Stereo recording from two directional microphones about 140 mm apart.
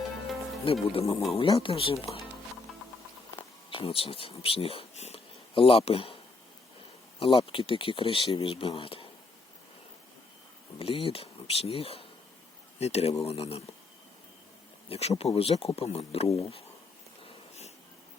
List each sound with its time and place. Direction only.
0.6 s speech: 40° left (ahead or behind)
1.0 s speech: 25° left (ahead or behind)
1.4 s speech: 40° left (ahead or behind)
2.7 s music: centre (ahead or behind)
3.7 s speech: 40° left (ahead or behind)
7.2 s speech: 40° left (ahead or behind)
10.8 s speech: 40° left (ahead or behind)
14.8 s speech: 45° left (ahead or behind)
17.2 s a sound: 50° left (ahead or behind)